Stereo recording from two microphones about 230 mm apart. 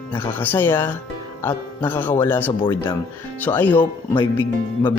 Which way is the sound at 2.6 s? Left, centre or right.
Left.